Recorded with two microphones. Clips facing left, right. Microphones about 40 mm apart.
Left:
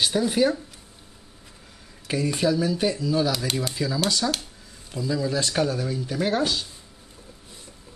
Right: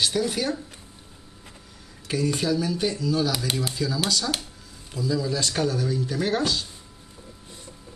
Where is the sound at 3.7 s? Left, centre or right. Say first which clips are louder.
Even; centre.